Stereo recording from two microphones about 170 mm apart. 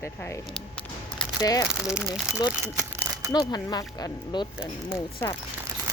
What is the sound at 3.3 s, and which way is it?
Speech, 25° left (ahead or behind).